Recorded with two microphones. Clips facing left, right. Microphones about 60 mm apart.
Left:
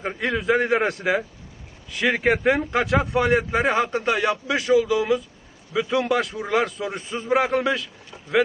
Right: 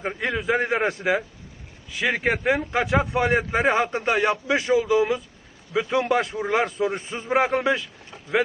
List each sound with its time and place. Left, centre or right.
0.0 s a man's voice: centre
3.1 s speech: centre